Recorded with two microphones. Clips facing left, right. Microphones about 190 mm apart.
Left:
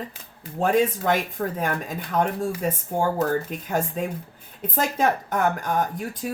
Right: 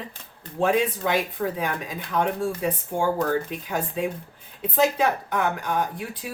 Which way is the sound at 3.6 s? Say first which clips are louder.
Left 1 dB; 45° left (ahead or behind).